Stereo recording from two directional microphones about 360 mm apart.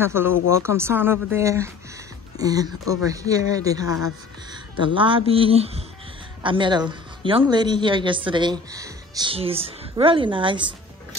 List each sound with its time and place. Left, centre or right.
0.0 s a woman's voice: centre
4.9 s a woman's voice: centre